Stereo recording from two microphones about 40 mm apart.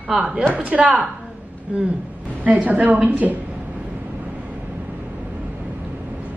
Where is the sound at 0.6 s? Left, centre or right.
Right.